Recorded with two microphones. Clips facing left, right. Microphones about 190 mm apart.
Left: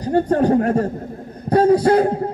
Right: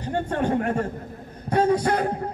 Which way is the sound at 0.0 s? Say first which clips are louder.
Left 8 dB; 40° left (ahead or behind).